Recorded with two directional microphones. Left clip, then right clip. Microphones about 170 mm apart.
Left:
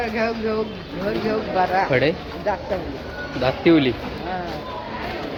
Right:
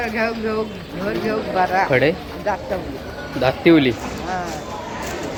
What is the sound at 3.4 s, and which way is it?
Speech, 20° right (ahead or behind).